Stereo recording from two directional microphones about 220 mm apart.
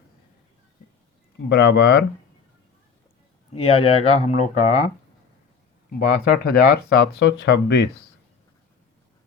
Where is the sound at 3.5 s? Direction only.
25° left (ahead or behind).